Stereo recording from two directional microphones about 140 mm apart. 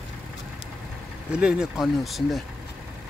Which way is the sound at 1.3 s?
5° right (ahead or behind).